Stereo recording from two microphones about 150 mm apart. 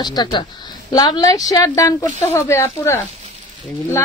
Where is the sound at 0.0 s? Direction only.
30° left (ahead or behind).